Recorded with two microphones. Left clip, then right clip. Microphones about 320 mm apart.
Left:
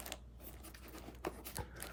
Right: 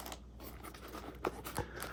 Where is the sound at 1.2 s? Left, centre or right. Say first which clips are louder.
Right 6 dB; centre.